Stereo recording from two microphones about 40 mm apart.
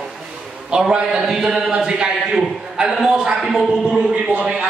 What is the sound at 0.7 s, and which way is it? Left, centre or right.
Speech, right.